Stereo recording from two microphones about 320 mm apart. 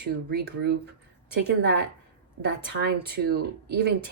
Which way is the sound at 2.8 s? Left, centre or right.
Right.